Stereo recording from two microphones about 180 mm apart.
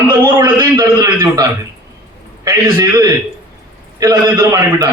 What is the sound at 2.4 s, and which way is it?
A man's voice, 20° right (ahead or behind).